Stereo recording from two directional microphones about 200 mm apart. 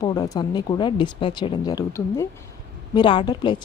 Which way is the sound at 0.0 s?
20° left (ahead or behind).